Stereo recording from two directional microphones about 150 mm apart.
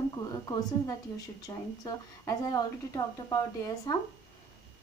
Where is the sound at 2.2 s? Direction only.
20° left (ahead or behind).